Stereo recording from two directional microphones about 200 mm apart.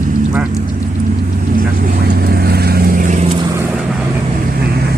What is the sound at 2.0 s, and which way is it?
Vehicle, 50° right (ahead or behind).